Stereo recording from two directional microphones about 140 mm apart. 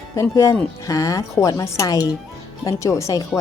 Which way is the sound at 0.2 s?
20° left (ahead or behind).